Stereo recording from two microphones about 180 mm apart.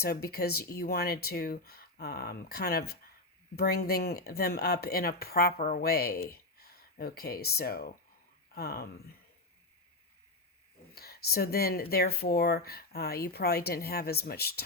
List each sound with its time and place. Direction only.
0.0 s speech: 60° left (ahead or behind)
10.9 s speech: 60° left (ahead or behind)